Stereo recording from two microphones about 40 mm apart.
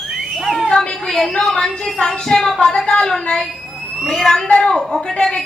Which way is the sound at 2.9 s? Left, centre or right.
Centre.